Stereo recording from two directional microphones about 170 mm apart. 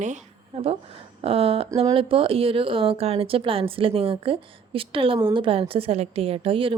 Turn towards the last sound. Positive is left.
turn(degrees=-30)  # may be behind; listen again after turning